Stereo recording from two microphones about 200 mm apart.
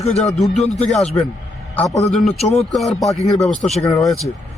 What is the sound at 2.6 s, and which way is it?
A man's voice, centre (ahead or behind).